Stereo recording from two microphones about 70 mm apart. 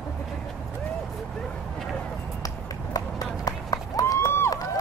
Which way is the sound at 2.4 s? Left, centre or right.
Left.